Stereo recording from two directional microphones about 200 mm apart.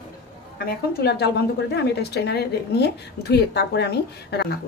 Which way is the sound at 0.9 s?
55° left (ahead or behind).